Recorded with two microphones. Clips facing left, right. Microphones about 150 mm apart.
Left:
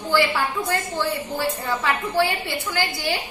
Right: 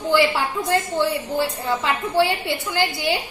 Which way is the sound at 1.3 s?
25° right (ahead or behind).